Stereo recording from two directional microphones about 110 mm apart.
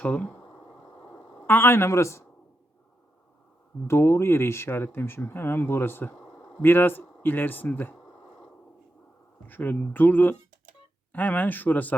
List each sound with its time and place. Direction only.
0.0 s speech: 10° left (ahead or behind)
3.8 s speech: 25° left (ahead or behind)
9.5 s speech: 15° left (ahead or behind)